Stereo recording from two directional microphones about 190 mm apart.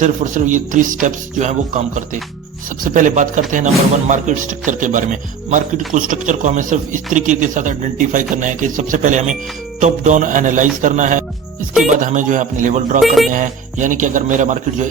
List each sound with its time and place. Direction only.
0.0 s a man's voice: 40° right (ahead or behind)
13.0 s speech: centre (ahead or behind)
13.3 s speech: 40° right (ahead or behind)